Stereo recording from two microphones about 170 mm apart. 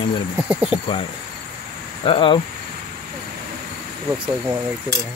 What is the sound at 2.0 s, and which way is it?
Speech, 30° left (ahead or behind).